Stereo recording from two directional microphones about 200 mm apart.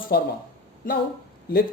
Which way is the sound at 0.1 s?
50° left (ahead or behind).